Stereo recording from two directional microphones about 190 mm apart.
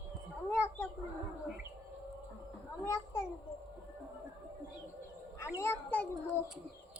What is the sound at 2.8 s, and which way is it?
Speech, 15° left (ahead or behind).